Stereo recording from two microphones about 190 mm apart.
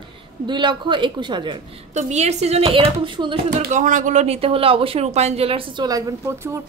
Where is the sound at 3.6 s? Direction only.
40° right (ahead or behind); by 6.6 s 15° right (ahead or behind).